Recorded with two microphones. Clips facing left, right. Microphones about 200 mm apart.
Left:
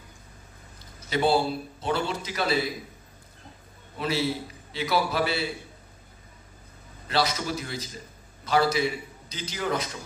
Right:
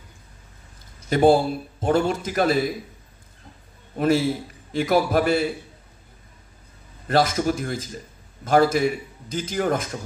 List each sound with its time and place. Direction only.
1.1 s a man's voice: 50° right (ahead or behind)
3.9 s a man's voice: 50° right (ahead or behind)
7.1 s a man's voice: 50° right (ahead or behind)